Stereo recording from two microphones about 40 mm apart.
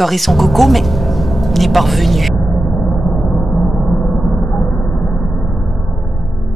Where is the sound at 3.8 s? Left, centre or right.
Centre.